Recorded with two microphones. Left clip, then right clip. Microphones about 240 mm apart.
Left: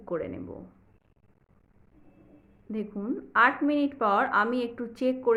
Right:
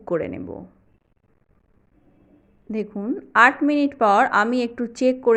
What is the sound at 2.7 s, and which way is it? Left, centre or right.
Speech, right.